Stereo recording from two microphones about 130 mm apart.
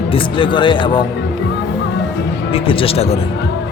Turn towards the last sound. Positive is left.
turn(degrees=50)  # may be behind; listen again after turning